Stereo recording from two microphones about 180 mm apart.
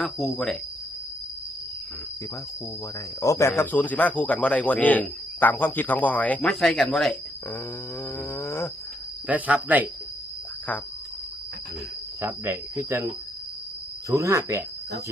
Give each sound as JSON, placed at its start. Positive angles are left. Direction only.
{"t": 0.0, "sound": "speech", "side_deg": 0}
{"t": 3.2, "sound": "speech", "side_deg": 15}
{"t": 9.2, "sound": "speech", "side_deg": -10}
{"t": 12.2, "sound": "speech", "side_deg": -15}
{"t": 14.1, "sound": "speech", "side_deg": -15}